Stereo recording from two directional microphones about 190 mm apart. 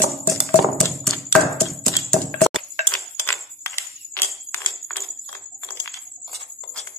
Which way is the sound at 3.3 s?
10° left (ahead or behind).